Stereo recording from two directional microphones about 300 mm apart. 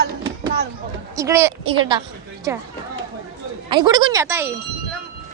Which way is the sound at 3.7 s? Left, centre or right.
Centre.